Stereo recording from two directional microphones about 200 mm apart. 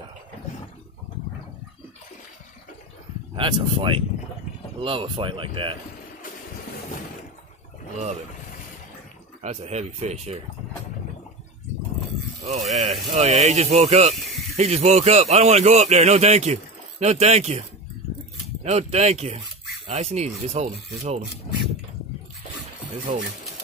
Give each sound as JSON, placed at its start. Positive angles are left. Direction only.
{"t": 3.3, "sound": "speech", "side_deg": -25}
{"t": 9.4, "sound": "speech", "side_deg": -35}
{"t": 12.4, "sound": "speech", "side_deg": -35}